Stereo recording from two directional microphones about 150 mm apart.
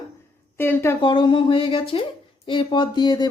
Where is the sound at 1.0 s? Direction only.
30° left (ahead or behind).